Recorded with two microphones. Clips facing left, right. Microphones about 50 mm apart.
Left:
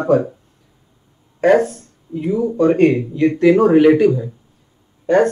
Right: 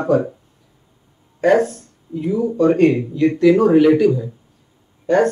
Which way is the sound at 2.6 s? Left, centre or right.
Left.